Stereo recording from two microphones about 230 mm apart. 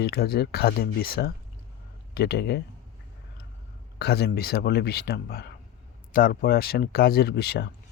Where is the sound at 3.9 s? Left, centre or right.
Left.